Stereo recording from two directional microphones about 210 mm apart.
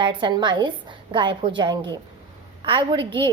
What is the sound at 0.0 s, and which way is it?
A woman's voice, 20° right (ahead or behind).